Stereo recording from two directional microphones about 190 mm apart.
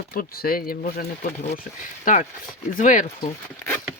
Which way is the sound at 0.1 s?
50° left (ahead or behind).